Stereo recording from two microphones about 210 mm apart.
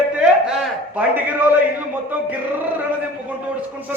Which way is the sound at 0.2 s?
5° right (ahead or behind).